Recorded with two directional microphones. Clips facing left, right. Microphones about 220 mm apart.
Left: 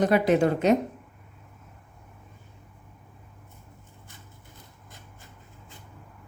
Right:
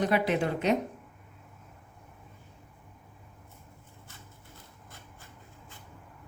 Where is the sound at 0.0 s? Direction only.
45° left (ahead or behind).